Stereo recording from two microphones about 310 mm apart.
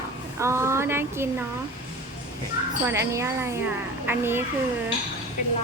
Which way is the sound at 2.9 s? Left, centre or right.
Centre.